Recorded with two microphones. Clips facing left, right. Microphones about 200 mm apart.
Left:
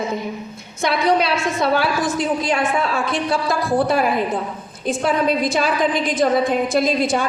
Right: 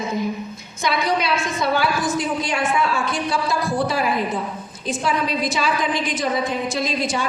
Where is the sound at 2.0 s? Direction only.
55° left (ahead or behind).